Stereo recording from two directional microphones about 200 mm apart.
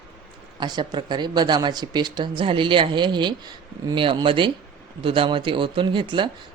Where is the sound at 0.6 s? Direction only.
20° right (ahead or behind).